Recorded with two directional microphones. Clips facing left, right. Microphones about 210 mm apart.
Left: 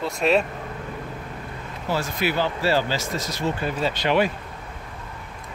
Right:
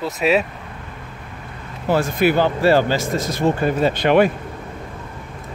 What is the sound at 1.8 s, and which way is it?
Speech, 55° right (ahead or behind).